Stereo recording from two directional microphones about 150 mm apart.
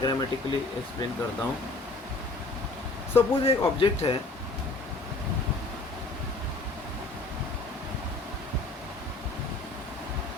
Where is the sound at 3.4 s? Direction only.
35° left (ahead or behind).